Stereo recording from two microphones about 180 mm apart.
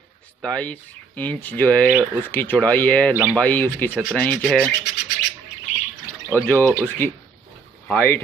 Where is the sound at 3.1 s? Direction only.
10° right (ahead or behind).